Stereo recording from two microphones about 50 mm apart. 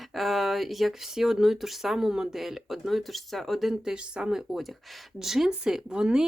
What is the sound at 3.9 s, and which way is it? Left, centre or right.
Speech, centre.